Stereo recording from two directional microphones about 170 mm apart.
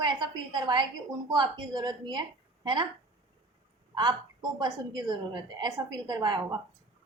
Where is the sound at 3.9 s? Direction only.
25° right (ahead or behind).